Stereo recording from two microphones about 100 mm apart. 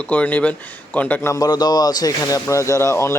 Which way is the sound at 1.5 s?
45° left (ahead or behind).